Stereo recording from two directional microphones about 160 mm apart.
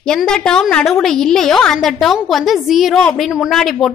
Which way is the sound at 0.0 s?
5° left (ahead or behind).